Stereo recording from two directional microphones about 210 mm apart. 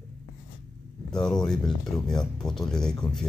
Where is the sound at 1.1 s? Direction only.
5° left (ahead or behind).